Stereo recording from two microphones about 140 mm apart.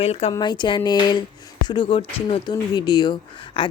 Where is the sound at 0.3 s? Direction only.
30° left (ahead or behind).